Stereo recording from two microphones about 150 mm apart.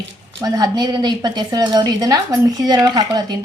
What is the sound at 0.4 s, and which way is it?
A woman's voice, 25° right (ahead or behind).